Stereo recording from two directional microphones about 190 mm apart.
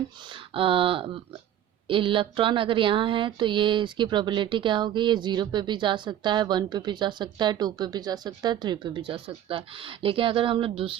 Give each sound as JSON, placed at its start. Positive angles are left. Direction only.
{"t": 0.5, "sound": "speech", "side_deg": -30}